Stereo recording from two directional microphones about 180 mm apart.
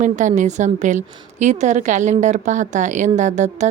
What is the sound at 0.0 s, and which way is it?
A woman's voice, 45° right (ahead or behind).